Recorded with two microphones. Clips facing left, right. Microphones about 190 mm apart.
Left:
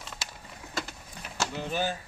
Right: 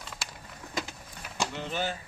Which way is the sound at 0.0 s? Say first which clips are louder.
Even; centre (ahead or behind).